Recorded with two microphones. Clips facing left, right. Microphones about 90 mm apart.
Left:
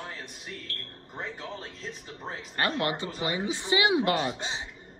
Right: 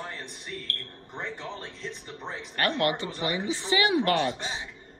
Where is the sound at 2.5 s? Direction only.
20° left (ahead or behind).